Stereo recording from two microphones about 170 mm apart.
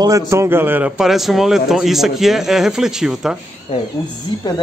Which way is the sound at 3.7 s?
40° left (ahead or behind).